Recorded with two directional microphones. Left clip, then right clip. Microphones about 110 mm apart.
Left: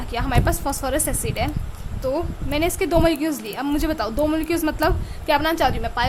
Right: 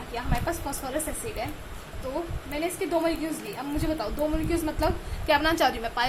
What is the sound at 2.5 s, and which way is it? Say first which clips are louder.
A woman's voice: left 8 dB; 90° left.